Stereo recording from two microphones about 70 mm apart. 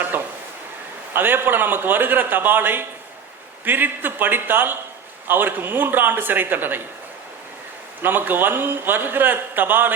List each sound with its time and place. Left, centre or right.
0.1 s a sound: right
1.1 s a man's voice: right
8.0 s a man's voice: right